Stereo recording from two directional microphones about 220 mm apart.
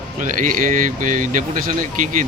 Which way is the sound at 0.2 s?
35° right (ahead or behind).